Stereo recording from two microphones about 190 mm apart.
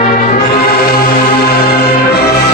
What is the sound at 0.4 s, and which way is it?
Music, 55° left (ahead or behind).